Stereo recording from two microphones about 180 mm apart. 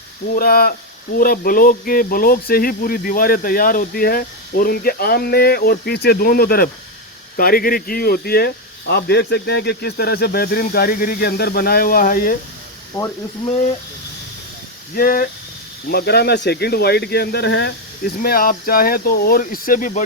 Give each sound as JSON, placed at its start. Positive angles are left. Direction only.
{"t": 0.3, "sound": "speech", "side_deg": 55}
{"t": 12.9, "sound": "speech", "side_deg": 25}
{"t": 14.9, "sound": "speech", "side_deg": 55}